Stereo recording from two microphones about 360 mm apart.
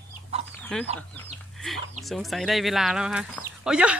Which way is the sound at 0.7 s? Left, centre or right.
Centre.